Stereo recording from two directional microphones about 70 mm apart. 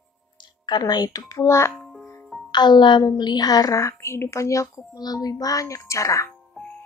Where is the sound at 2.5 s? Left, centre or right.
Left.